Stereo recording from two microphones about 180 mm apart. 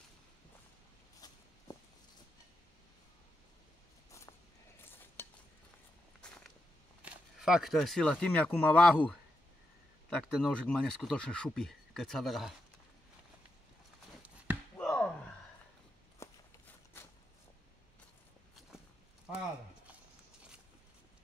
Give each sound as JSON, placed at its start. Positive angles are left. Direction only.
{"t": 1.2, "sound": "walk", "side_deg": 20}
{"t": 4.8, "sound": "cutlery", "side_deg": 10}
{"t": 6.2, "sound": "walk", "side_deg": 5}
{"t": 7.0, "sound": "speech", "side_deg": -5}
{"t": 14.8, "sound": "a sound", "side_deg": 10}
{"t": 16.2, "sound": "walk", "side_deg": 15}